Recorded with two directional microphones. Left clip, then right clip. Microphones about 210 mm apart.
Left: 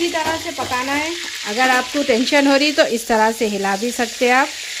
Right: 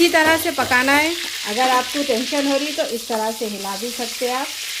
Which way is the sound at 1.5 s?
25° left (ahead or behind).